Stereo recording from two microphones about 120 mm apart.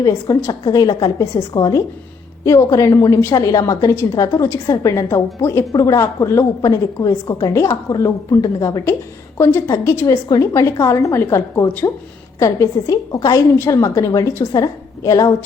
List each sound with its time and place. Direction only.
0.0 s a woman's voice: 25° left (ahead or behind)